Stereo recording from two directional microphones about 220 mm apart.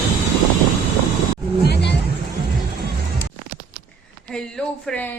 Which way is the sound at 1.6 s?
50° left (ahead or behind).